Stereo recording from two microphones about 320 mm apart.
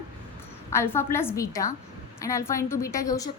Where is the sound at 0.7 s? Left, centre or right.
Centre.